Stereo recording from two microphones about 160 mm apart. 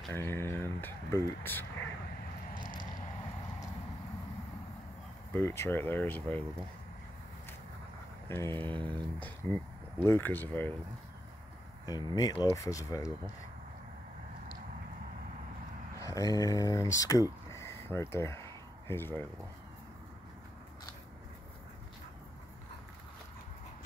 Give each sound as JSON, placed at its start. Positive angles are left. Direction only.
{"t": 0.1, "sound": "speech", "side_deg": 15}
{"t": 2.6, "sound": "mechanisms", "side_deg": -30}
{"t": 5.3, "sound": "speech", "side_deg": 15}
{"t": 8.3, "sound": "speech", "side_deg": 15}
{"t": 8.5, "sound": "speech", "side_deg": -30}
{"t": 9.2, "sound": "speech", "side_deg": 10}
{"t": 11.8, "sound": "speech", "side_deg": 25}
{"t": 16.0, "sound": "speech", "side_deg": 20}